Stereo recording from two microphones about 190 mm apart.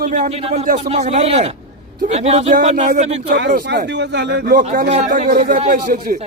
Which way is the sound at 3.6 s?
65° right (ahead or behind).